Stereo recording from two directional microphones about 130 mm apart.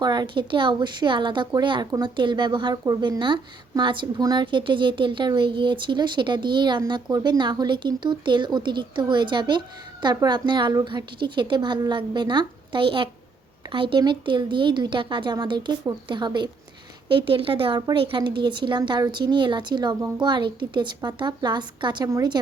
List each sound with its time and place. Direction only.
0.0 s a woman's voice: 35° right (ahead or behind)